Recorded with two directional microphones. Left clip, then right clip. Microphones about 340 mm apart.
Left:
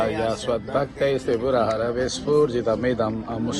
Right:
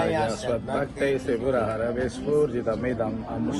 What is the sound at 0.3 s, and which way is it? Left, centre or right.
A man's voice, left.